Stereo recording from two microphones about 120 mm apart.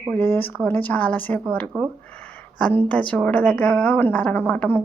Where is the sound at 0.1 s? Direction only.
15° left (ahead or behind).